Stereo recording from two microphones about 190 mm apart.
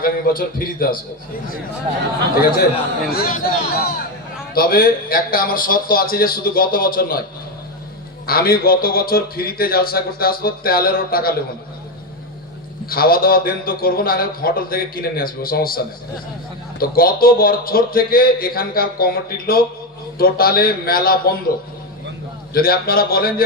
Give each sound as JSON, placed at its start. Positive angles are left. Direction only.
{"t": 0.0, "sound": "a man's voice", "side_deg": 50}
{"t": 3.1, "sound": "a man's voice", "side_deg": 50}
{"t": 8.3, "sound": "a man's voice", "side_deg": 50}
{"t": 12.8, "sound": "a man's voice", "side_deg": 50}
{"t": 16.8, "sound": "a man's voice", "side_deg": 50}
{"t": 22.5, "sound": "a man's voice", "side_deg": 50}